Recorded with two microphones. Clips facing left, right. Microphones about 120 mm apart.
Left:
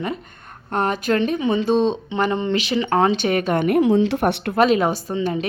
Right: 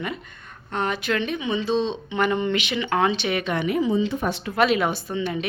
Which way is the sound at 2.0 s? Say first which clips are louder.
Left 2 dB; 30° left (ahead or behind).